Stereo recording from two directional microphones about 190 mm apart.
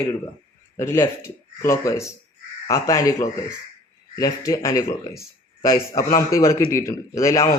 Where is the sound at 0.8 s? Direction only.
15° left (ahead or behind).